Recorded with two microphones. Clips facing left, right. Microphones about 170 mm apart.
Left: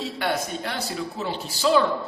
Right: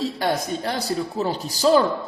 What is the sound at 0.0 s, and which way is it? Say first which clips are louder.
A man's voice: right 3 dB; 35° right (ahead or behind).